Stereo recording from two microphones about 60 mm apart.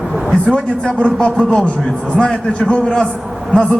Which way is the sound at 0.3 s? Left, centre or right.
Centre.